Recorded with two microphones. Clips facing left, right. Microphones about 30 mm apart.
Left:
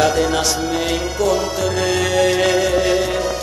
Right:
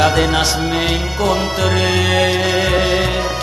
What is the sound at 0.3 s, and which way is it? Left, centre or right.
Music, right.